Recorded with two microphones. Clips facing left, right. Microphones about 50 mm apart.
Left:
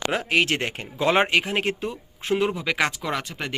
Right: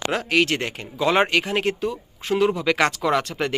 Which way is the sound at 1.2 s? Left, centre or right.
Centre.